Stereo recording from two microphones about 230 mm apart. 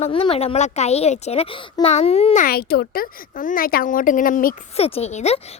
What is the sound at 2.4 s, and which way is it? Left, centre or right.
Speech, left.